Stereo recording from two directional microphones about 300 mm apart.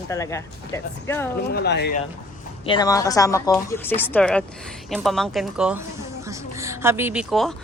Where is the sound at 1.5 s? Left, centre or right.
Left.